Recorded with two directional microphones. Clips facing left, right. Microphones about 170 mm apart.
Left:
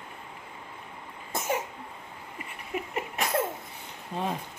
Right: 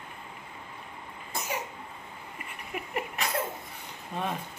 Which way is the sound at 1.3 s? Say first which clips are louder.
Left 3 dB; 50° left (ahead or behind).